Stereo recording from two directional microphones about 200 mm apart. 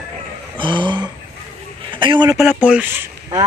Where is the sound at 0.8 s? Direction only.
20° right (ahead or behind).